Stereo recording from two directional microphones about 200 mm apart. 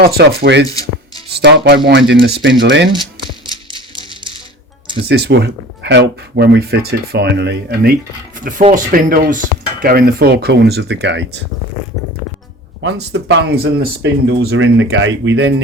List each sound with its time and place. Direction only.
0.0 s speech: 50° right (ahead or behind)
0.7 s rub: 20° left (ahead or behind)
1.4 s speech: 60° right (ahead or behind)
2.9 s music: 25° right (ahead or behind)
5.0 s speech: 55° right (ahead or behind)
8.4 s speech: 40° right (ahead or behind); by 11.4 s 60° right (ahead or behind)
12.8 s speech: 60° right (ahead or behind)
14.5 s speech: 70° right (ahead or behind)